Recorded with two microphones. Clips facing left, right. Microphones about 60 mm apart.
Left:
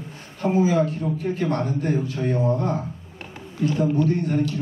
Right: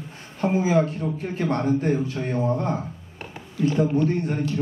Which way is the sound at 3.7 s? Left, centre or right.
Right.